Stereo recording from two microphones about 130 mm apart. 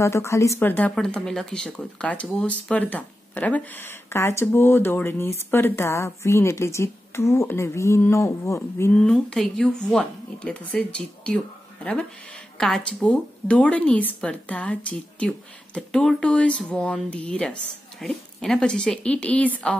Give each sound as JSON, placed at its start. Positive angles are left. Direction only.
{"t": 0.0, "sound": "speech", "side_deg": 20}
{"t": 8.9, "sound": "speech", "side_deg": 5}